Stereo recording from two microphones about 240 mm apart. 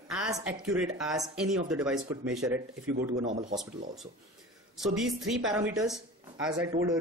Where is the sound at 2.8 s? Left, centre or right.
Right.